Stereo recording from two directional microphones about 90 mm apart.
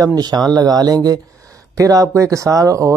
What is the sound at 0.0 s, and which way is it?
Speech, 50° right (ahead or behind).